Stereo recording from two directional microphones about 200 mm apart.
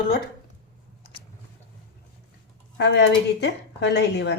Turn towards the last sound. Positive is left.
turn(degrees=60)  # may be behind; listen again after turning